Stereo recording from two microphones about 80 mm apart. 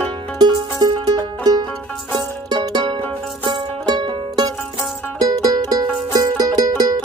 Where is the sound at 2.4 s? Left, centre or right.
Right.